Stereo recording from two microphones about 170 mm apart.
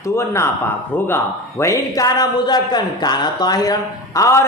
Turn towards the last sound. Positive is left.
turn(degrees=20)  # may be behind; listen again after turning